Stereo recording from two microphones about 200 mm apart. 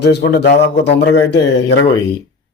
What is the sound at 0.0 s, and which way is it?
A man's voice, 55° left (ahead or behind).